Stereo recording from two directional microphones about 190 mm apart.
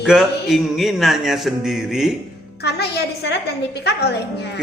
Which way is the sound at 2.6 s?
60° left (ahead or behind).